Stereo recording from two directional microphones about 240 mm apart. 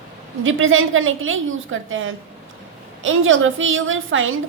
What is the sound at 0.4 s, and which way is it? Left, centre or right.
A woman's voice, right.